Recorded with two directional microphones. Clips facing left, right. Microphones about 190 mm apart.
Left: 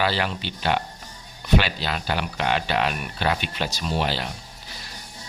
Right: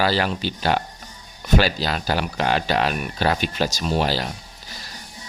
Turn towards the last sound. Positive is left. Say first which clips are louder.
# right 4 dB
turn(degrees=-40)  # may be behind; listen again after turning